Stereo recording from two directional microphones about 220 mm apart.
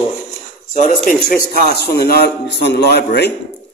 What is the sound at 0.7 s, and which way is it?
A man's voice, 40° left (ahead or behind).